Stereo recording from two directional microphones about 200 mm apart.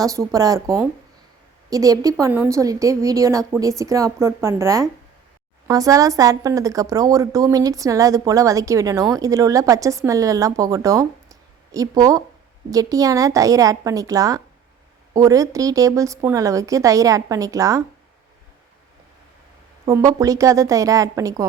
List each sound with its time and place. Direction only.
0.0 s speech: 15° right (ahead or behind)
1.7 s speech: 15° right (ahead or behind)
19.9 s speech: 15° right (ahead or behind)